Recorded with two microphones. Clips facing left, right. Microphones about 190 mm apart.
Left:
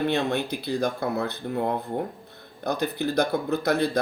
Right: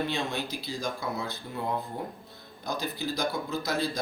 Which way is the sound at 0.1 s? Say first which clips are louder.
Left 7 dB; 60° left (ahead or behind).